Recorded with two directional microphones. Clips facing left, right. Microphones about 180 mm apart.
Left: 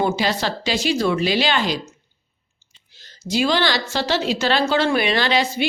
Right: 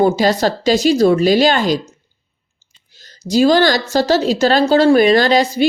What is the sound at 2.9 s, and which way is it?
A woman's voice, 40° right (ahead or behind).